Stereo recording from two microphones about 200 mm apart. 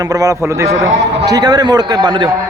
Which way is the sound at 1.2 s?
20° right (ahead or behind).